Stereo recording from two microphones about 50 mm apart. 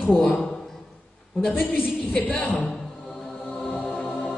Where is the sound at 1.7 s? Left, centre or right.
Left.